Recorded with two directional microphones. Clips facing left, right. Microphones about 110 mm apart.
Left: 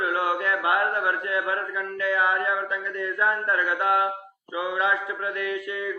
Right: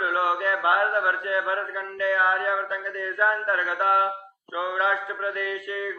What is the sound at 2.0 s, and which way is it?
Mantra, 35° right (ahead or behind).